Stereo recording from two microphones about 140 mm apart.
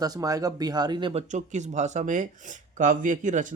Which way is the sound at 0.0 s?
25° right (ahead or behind).